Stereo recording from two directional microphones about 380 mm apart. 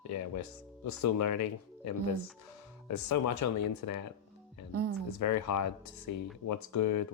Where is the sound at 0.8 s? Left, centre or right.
Left.